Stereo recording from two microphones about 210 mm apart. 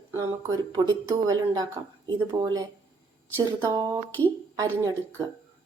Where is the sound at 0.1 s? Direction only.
15° right (ahead or behind).